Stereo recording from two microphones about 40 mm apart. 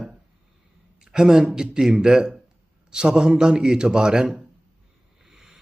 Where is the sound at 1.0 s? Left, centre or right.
Centre.